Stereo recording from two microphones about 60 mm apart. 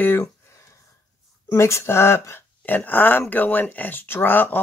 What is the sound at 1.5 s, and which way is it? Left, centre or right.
Speech, left.